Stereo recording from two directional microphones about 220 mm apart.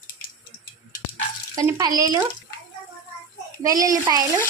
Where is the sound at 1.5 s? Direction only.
15° right (ahead or behind).